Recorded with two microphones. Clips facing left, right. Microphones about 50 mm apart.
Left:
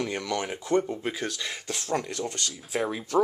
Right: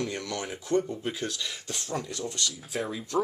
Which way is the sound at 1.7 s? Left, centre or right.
Left.